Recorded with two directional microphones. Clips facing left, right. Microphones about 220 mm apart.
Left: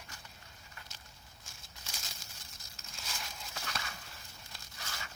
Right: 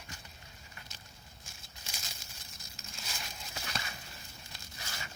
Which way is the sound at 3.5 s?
15° right (ahead or behind).